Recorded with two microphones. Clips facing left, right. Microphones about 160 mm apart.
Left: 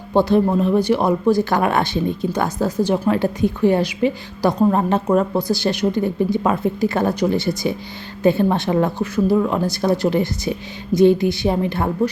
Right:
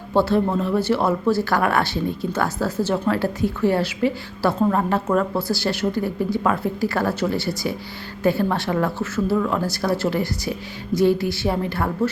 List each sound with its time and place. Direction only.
0.1 s speech: 15° left (ahead or behind)